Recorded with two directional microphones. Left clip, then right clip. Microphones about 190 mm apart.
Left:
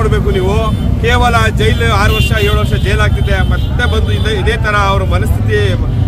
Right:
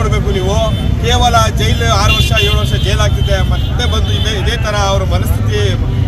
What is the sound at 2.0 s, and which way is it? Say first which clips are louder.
Speech: right 1 dB; 5° left (ahead or behind).